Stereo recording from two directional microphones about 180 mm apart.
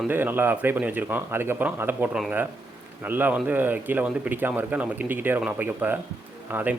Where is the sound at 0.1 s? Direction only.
10° right (ahead or behind).